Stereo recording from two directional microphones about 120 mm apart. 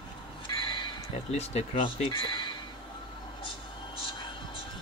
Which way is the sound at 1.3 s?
60° left (ahead or behind).